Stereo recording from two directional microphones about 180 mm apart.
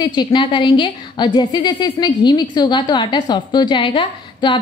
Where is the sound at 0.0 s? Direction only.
25° left (ahead or behind).